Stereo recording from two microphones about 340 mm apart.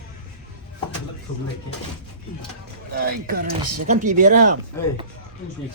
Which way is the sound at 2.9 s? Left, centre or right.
Right.